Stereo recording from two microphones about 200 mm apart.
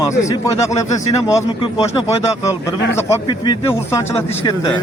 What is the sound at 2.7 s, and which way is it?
Speech, 15° left (ahead or behind).